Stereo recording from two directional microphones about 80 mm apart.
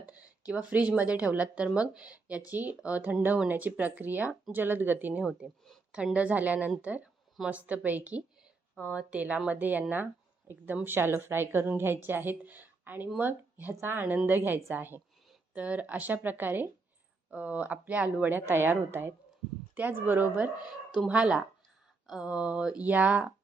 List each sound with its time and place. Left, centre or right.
0.0 s speech: centre
5.2 s speech: centre
6.1 s speech: centre
10.8 s speech: right
21.1 s speech: centre